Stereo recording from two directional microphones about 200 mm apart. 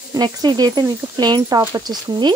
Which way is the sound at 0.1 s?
20° right (ahead or behind).